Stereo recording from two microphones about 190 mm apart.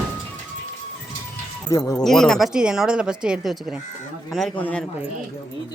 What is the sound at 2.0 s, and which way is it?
Speech, 5° left (ahead or behind).